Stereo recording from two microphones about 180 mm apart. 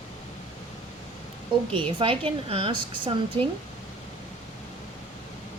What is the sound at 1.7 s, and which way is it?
Speech, 30° right (ahead or behind).